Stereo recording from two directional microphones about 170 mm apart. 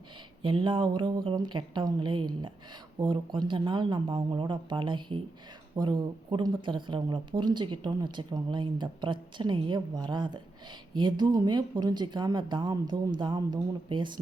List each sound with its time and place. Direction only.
0.4 s speech: 30° right (ahead or behind)